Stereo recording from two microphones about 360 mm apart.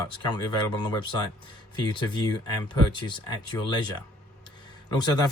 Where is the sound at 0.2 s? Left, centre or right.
Centre.